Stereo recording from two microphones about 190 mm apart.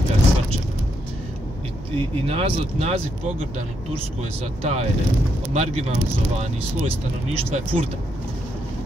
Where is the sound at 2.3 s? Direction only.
30° right (ahead or behind).